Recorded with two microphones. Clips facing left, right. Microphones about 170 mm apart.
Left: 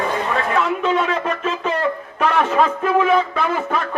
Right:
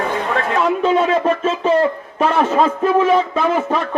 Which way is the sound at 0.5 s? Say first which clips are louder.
Right 5 dB; 35° right (ahead or behind).